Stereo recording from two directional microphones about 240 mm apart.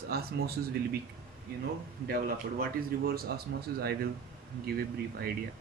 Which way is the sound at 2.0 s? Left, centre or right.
Right.